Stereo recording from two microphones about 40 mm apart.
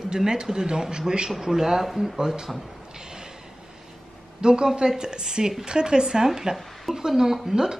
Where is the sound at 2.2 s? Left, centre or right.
Centre.